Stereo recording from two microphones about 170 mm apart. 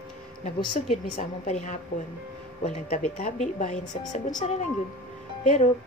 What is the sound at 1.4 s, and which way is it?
A woman's voice, 45° left (ahead or behind).